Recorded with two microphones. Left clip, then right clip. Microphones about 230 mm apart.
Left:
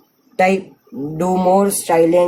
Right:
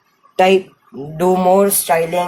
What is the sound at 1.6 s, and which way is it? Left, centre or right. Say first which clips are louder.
Music: right 1 dB; right.